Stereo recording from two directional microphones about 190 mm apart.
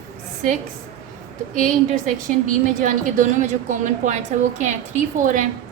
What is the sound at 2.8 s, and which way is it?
A woman's voice, 40° right (ahead or behind).